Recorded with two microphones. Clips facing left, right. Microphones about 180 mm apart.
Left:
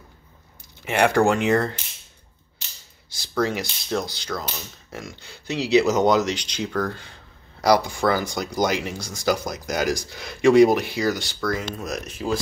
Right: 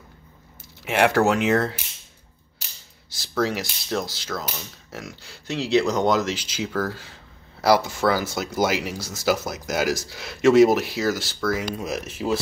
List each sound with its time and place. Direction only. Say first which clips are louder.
0.8 s speech: even; 5° right (ahead or behind)
3.1 s speech: even; centre (ahead or behind)